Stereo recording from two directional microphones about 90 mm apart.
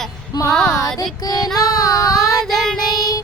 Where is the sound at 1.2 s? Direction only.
45° left (ahead or behind).